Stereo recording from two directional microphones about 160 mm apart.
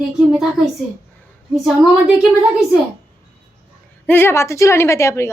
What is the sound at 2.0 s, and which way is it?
Speech, 5° right (ahead or behind).